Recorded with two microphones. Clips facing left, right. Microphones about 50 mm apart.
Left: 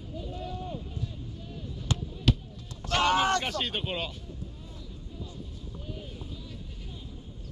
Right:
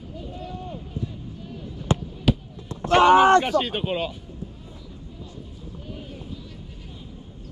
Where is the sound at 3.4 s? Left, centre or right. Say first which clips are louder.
Right 8 dB; centre.